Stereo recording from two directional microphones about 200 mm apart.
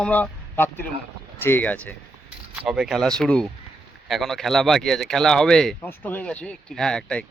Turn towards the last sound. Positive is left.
turn(degrees=5)  # may be behind; listen again after turning